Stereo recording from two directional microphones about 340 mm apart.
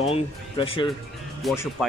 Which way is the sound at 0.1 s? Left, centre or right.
Centre.